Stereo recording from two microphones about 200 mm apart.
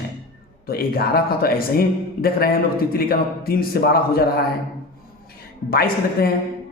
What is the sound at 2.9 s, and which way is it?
A man's voice, 50° left (ahead or behind).